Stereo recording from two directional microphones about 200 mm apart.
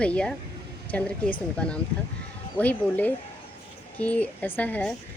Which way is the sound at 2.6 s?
10° left (ahead or behind).